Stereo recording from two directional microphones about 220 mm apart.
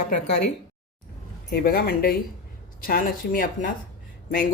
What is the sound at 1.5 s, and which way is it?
Speech, 45° left (ahead or behind).